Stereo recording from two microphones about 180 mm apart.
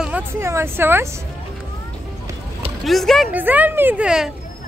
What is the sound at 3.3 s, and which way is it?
Speech, 10° right (ahead or behind).